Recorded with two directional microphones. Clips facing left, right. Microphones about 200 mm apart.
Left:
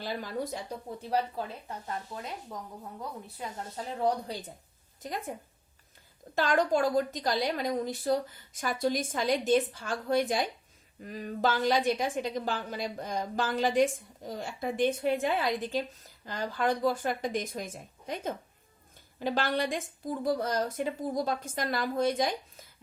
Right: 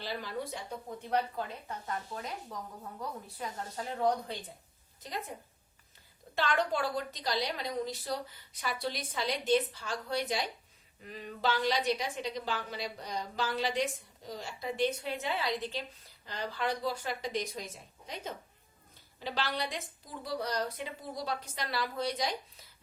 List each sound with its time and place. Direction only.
0.0 s speech: 45° left (ahead or behind); by 1.7 s 30° left (ahead or behind)
2.1 s speech: 5° left (ahead or behind)
4.0 s speech: 40° left (ahead or behind)
5.0 s a woman's voice: 50° left (ahead or behind)
6.3 s a woman's voice: 40° left (ahead or behind)